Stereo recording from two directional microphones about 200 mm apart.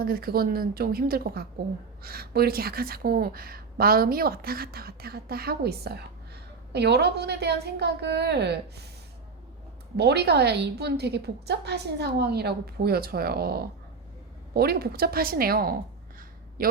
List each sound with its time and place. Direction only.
0.0 s a woman's voice: 50° right (ahead or behind)
10.0 s a woman's voice: 55° right (ahead or behind)